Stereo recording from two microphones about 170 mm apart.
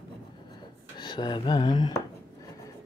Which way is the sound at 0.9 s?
25° left (ahead or behind).